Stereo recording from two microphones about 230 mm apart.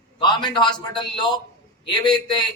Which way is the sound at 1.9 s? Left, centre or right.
Centre.